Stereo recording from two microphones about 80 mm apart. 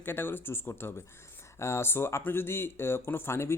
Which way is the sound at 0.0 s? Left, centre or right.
Left.